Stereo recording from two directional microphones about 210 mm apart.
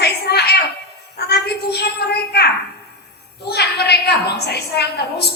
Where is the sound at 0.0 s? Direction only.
50° left (ahead or behind).